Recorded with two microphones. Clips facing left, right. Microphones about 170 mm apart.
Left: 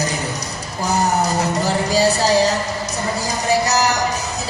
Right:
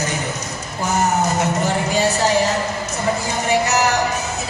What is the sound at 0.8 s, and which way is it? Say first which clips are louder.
Music: even; 35° left (ahead or behind).